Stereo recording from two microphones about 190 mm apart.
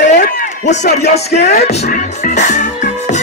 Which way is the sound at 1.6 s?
40° left (ahead or behind).